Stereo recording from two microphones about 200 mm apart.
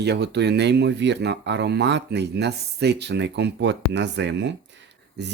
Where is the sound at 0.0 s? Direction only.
55° right (ahead or behind).